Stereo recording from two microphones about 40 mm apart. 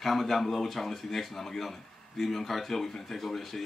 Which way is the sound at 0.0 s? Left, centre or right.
Centre.